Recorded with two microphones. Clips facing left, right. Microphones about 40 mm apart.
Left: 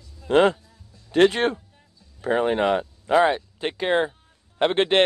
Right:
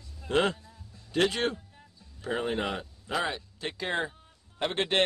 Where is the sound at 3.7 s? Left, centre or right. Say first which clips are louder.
Left 9 dB; left.